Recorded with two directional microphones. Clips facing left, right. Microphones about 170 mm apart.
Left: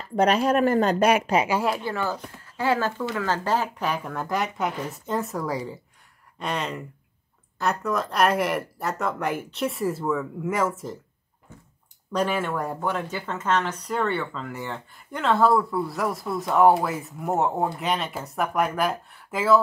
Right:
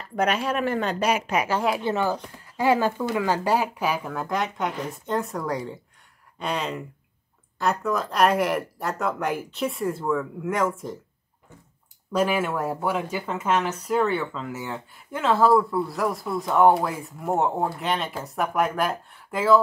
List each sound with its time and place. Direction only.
0.1 s speech: 35° left (ahead or behind)
1.2 s speech: 30° left (ahead or behind)
1.5 s speech: 5° left (ahead or behind)
1.9 s speech: 15° right (ahead or behind); by 11.0 s centre (ahead or behind)
12.1 s speech: 5° right (ahead or behind)